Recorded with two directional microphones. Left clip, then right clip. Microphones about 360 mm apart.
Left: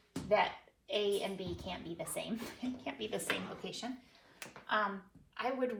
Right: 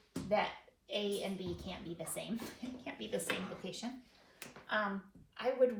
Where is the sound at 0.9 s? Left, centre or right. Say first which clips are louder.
Left 4 dB; centre.